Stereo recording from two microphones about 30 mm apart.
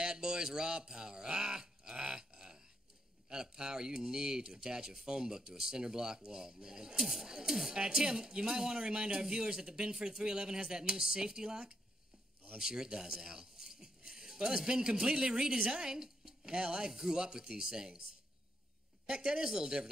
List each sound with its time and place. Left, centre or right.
0.0 s a sound: right
3.3 s speech: right
19.0 s speech: right